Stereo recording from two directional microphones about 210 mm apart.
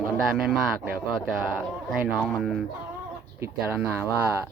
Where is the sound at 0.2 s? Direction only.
Centre (ahead or behind).